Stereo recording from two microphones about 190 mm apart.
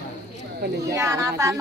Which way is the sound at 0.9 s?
15° right (ahead or behind).